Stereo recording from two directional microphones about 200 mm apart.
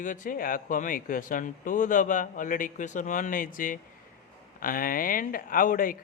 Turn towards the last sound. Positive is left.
turn(degrees=45)  # may be behind; listen again after turning